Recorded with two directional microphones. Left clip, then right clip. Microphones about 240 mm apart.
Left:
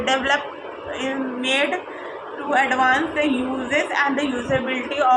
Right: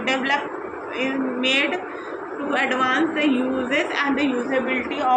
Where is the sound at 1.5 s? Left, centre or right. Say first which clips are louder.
Left 1 dB; centre.